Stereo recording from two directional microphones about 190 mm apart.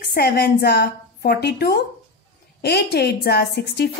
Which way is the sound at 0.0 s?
55° left (ahead or behind).